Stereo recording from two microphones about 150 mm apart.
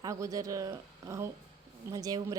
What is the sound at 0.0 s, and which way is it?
Speech, 20° right (ahead or behind).